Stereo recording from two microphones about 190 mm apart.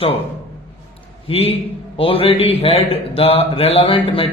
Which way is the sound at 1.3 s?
30° left (ahead or behind).